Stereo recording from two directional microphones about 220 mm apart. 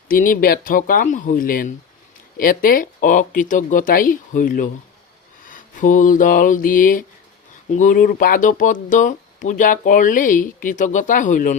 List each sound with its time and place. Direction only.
0.1 s speech: 40° left (ahead or behind)
5.5 s a sound: 35° left (ahead or behind)
7.7 s speech: 35° left (ahead or behind)